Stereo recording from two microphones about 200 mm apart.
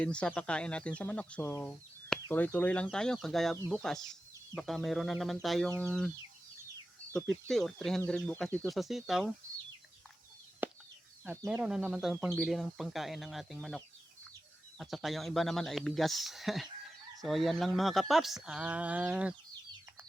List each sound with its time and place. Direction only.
0.0 s speech: 5° left (ahead or behind)
7.4 s speech: centre (ahead or behind)
10.6 s a sound: 10° right (ahead or behind)
11.3 s speech: 5° right (ahead or behind)